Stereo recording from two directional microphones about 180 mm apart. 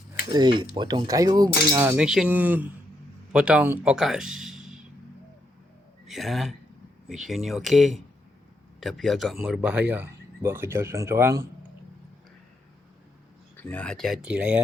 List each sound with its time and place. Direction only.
0.3 s speech: 25° right (ahead or behind); by 4.8 s 5° right (ahead or behind)
6.1 s speech: centre (ahead or behind)
13.6 s speech: 10° left (ahead or behind)